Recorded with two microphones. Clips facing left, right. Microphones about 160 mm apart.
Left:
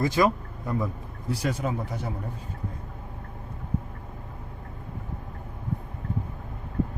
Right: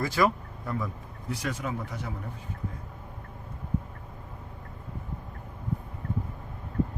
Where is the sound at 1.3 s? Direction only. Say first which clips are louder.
Left 4 dB; 35° left (ahead or behind).